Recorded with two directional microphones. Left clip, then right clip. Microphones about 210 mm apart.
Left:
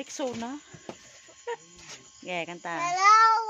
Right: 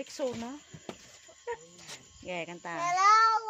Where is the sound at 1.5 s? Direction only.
20° left (ahead or behind).